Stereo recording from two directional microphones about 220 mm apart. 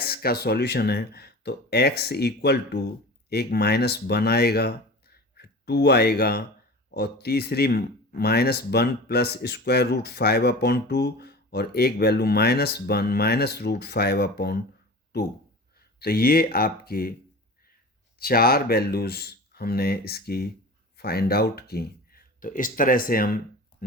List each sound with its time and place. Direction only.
0.0 s speech: 45° left (ahead or behind)
18.2 s speech: 45° left (ahead or behind)